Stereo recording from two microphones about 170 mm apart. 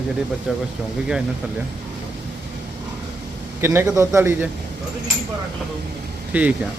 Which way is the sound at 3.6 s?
15° right (ahead or behind).